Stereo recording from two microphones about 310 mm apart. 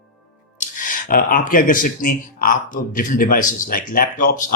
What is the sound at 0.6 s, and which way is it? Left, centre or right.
Speech, left.